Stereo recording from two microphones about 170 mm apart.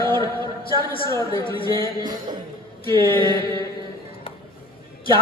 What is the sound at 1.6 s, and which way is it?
Speech, 25° right (ahead or behind).